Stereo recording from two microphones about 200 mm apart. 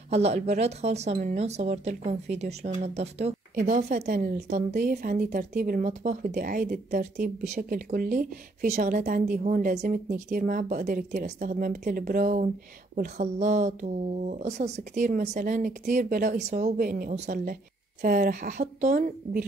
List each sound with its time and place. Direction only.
0.1 s a woman's voice: 30° right (ahead or behind)